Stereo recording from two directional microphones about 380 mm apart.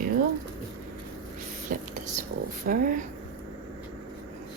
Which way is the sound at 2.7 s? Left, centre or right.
Right.